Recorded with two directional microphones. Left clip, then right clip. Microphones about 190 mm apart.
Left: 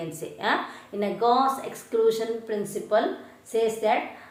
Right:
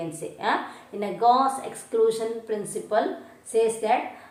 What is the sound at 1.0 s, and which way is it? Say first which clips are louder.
A woman's voice: right 2 dB; 20° left (ahead or behind).